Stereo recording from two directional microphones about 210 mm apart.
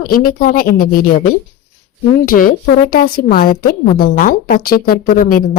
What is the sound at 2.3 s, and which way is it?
A woman's voice, 45° left (ahead or behind).